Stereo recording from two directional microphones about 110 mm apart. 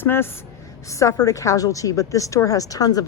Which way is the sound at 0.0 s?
20° left (ahead or behind).